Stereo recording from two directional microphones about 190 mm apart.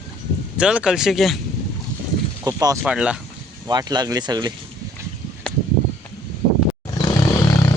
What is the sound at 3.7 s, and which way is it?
Speech, 20° right (ahead or behind).